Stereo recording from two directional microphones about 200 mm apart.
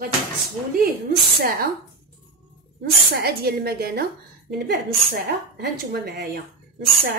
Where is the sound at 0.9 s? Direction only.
50° right (ahead or behind).